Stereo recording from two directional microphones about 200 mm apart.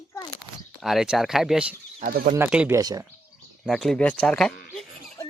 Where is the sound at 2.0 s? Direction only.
45° right (ahead or behind).